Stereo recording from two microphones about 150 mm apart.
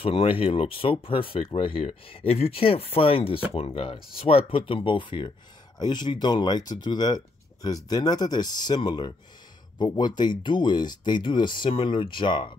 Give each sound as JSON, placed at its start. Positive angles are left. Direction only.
{"t": 0.0, "sound": "speech", "side_deg": 40}